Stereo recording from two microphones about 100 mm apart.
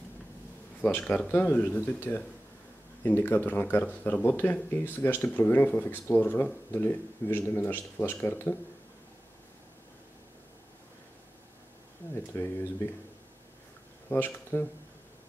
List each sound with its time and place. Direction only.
0.7 s speech: 15° left (ahead or behind)
12.3 s speech: 25° left (ahead or behind)
14.0 s speech: 20° left (ahead or behind)